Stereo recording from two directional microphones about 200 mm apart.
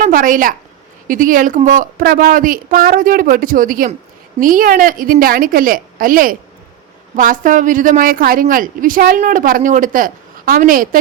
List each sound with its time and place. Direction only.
0.0 s a woman's voice: 40° right (ahead or behind)